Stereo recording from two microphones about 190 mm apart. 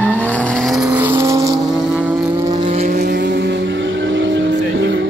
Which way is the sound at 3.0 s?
55° right (ahead or behind).